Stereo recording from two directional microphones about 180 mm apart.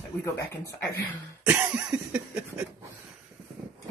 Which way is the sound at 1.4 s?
10° right (ahead or behind).